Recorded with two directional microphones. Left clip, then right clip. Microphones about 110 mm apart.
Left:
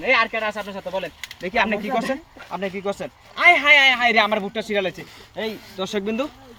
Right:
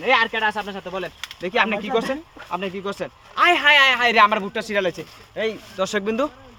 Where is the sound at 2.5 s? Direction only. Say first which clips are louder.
Left 1 dB; 30° right (ahead or behind).